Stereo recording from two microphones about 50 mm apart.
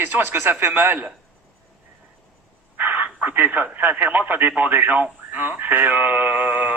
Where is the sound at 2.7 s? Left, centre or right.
Right.